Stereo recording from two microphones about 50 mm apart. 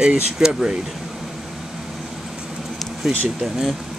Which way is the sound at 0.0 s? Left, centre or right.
Centre.